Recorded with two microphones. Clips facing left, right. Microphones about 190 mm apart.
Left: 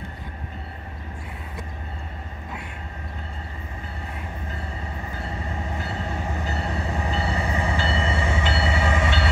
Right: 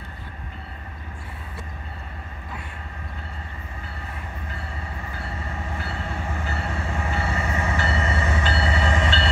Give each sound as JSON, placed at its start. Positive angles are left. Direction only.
{"t": 5.8, "sound": "train", "side_deg": 20}
{"t": 7.7, "sound": "train", "side_deg": 30}
{"t": 8.2, "sound": "train", "side_deg": 15}
{"t": 8.7, "sound": "train", "side_deg": 10}